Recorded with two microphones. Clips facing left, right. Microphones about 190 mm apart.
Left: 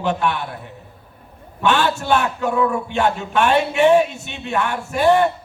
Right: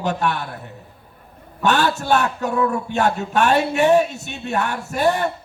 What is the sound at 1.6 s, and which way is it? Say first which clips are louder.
A man's voice: even; 40° right (ahead or behind).